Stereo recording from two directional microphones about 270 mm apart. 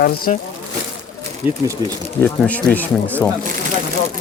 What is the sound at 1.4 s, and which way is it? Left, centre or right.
Speech, centre.